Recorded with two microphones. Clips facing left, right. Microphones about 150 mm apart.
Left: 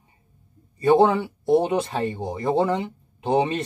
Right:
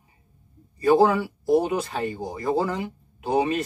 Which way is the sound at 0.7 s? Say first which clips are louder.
Left 1 dB; 25° left (ahead or behind).